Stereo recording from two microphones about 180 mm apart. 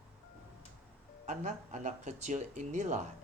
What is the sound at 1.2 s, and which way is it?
Speech, 40° right (ahead or behind).